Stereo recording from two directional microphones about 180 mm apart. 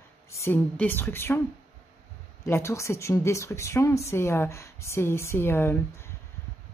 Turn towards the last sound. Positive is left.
turn(degrees=15)  # may be behind; listen again after turning